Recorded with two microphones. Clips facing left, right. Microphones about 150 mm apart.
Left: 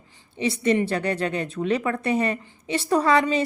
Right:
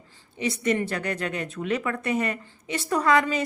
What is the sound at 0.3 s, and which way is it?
A woman's voice, 30° left (ahead or behind).